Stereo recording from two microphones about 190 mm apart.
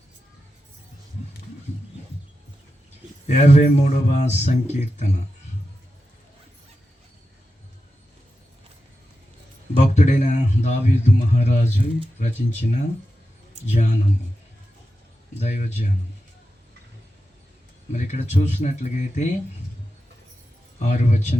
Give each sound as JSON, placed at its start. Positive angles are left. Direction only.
{"t": 3.2, "sound": "speech", "side_deg": 40}
{"t": 9.7, "sound": "speech", "side_deg": 35}
{"t": 15.4, "sound": "speech", "side_deg": 35}
{"t": 17.9, "sound": "speech", "side_deg": 35}
{"t": 20.7, "sound": "speech", "side_deg": 35}